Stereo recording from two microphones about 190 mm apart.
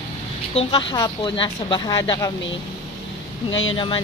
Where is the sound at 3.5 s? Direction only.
90° left.